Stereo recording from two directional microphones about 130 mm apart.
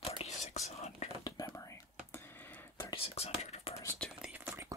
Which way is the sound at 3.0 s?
50° left (ahead or behind).